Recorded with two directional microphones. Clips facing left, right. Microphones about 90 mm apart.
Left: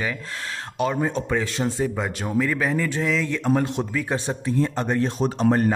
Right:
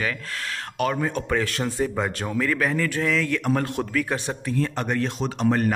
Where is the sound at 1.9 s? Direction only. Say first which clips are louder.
Left 1 dB; 5° left (ahead or behind).